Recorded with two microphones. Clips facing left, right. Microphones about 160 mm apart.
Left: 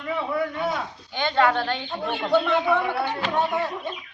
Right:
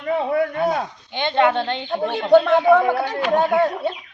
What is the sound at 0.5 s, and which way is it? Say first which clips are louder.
Speech: right 6 dB; 55° right (ahead or behind).